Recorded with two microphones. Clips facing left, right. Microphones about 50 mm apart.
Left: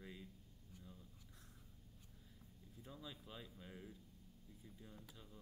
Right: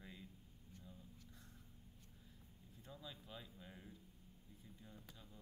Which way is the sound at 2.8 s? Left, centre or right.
Centre.